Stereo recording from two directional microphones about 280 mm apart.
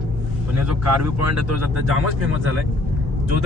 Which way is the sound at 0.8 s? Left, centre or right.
Right.